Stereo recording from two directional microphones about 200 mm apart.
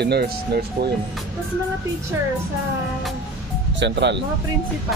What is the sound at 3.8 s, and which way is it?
Speech, 60° right (ahead or behind).